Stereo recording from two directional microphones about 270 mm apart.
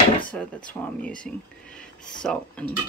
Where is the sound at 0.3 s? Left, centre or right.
Centre.